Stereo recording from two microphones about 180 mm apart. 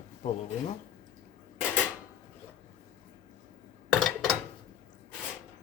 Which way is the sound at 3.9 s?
Centre (ahead or behind).